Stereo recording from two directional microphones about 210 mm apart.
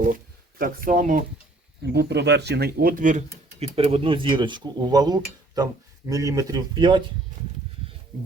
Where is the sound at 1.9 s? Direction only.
50° right (ahead or behind); by 7.0 s 20° right (ahead or behind).